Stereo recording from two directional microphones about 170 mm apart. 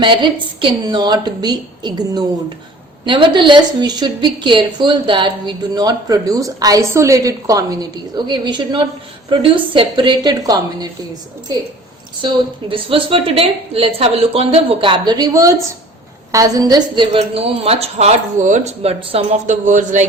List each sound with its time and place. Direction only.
0.0 s a woman's voice: 30° right (ahead or behind)
12.2 s a woman's voice: 30° right (ahead or behind); by 20.1 s 45° right (ahead or behind)